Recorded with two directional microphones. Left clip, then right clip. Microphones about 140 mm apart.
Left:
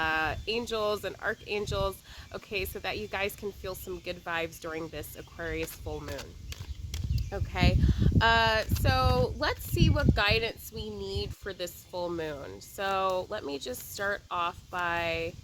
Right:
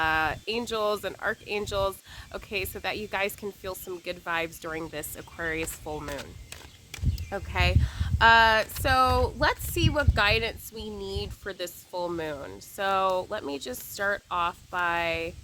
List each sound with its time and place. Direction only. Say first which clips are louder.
0.0 s speech: right 3 dB; 25° right (ahead or behind)
7.3 s speech: right 3 dB; 20° right (ahead or behind)